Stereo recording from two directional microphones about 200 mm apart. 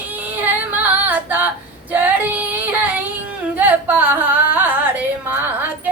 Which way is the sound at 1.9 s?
10° right (ahead or behind).